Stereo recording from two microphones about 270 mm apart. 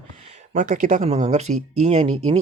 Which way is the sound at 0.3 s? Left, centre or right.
Right.